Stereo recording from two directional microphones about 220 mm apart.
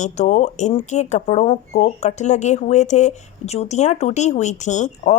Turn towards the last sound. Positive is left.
turn(degrees=30)  # may be behind; listen again after turning